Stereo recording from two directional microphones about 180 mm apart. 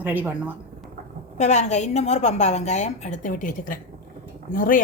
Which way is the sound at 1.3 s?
40° left (ahead or behind).